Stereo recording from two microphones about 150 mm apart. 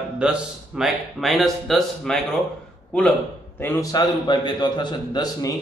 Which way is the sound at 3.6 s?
20° left (ahead or behind).